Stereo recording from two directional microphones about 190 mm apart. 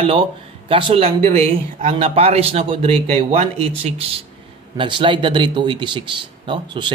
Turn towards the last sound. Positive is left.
turn(degrees=-25)  # may be behind; listen again after turning